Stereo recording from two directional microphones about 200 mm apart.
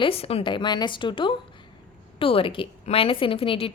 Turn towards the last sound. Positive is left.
turn(degrees=25)  # may be behind; listen again after turning